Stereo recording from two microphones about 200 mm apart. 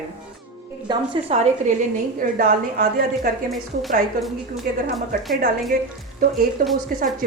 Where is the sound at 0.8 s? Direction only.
25° right (ahead or behind); by 3.3 s 45° right (ahead or behind).